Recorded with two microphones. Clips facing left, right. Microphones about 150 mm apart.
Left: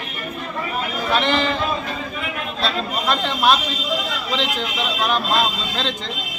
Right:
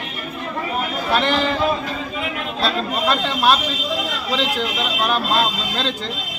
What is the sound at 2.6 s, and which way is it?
Speech, 10° right (ahead or behind).